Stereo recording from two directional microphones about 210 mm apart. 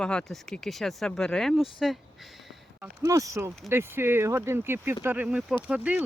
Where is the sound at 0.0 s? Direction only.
5° left (ahead or behind).